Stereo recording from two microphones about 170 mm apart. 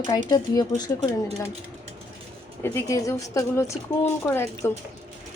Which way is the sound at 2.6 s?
15° left (ahead or behind).